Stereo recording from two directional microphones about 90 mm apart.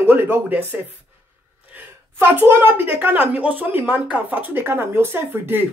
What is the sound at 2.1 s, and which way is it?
A woman's voice, 25° right (ahead or behind).